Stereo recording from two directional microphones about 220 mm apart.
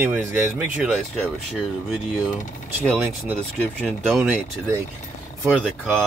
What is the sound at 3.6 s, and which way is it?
Speech, centre (ahead or behind).